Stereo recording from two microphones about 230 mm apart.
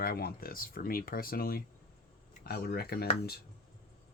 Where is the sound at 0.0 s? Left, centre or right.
Left.